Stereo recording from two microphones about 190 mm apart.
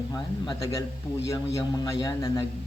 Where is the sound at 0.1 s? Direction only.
20° left (ahead or behind).